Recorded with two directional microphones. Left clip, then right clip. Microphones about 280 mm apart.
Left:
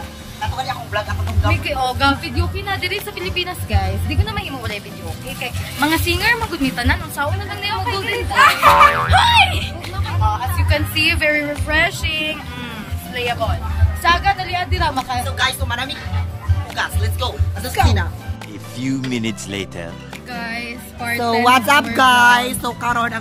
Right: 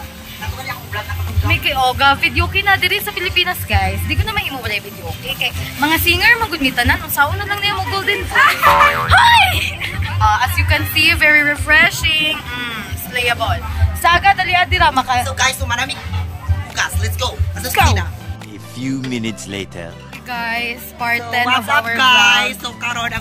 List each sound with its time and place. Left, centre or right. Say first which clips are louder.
1.5 s speech: right 5 dB; centre
14.0 s speech: right 4 dB; centre
15.3 s a woman's voice: right 3 dB; centre
18.8 s speech: even; centre
21.5 s speech: left 4 dB; left